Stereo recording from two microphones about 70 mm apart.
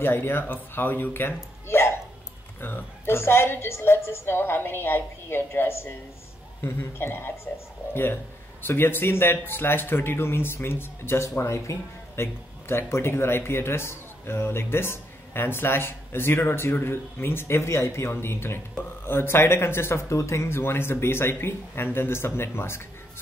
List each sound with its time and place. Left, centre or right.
0.0 s speech: left